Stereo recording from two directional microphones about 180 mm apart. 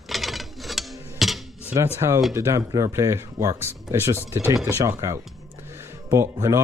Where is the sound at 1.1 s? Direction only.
Centre (ahead or behind).